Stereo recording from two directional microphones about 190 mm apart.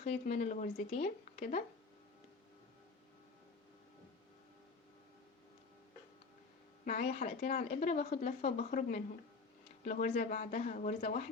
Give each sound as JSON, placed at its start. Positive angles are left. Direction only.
{"t": 0.0, "sound": "speech", "side_deg": 40}
{"t": 6.8, "sound": "speech", "side_deg": 40}